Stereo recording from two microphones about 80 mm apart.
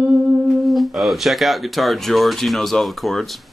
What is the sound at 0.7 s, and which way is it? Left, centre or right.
Speech, centre.